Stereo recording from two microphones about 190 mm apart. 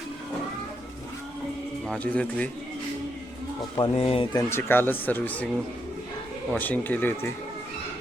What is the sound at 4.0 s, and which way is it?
Speech, 30° left (ahead or behind).